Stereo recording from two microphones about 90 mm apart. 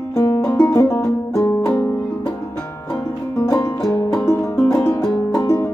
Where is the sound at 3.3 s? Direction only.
25° left (ahead or behind).